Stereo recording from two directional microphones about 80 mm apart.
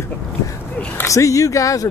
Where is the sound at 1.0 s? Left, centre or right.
Left.